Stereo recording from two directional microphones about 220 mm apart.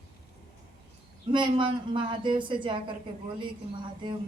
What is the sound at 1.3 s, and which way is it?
Speech, 20° right (ahead or behind).